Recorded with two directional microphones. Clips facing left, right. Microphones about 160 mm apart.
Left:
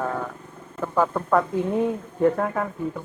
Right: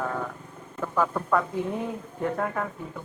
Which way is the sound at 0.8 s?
20° left (ahead or behind).